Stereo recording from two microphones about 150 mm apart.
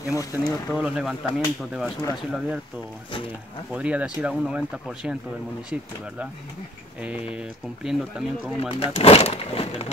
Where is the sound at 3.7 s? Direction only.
10° right (ahead or behind).